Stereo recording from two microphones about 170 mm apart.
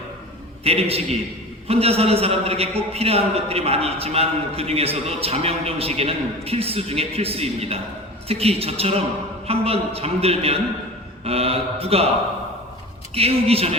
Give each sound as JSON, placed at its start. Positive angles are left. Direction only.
{"t": 0.6, "sound": "a man's voice", "side_deg": -35}
{"t": 13.1, "sound": "a man's voice", "side_deg": -35}